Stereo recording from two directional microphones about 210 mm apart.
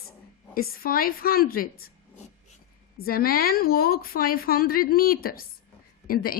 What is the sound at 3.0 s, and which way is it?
A woman's voice, 45° left (ahead or behind).